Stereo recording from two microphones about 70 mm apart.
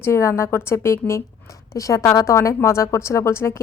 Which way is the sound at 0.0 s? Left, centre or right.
Left.